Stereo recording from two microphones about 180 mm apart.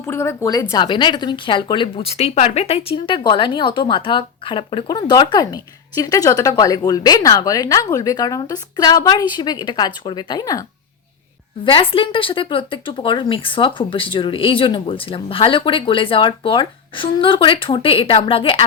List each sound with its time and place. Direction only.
0.1 s speech: 15° left (ahead or behind)
11.6 s speech: 30° left (ahead or behind)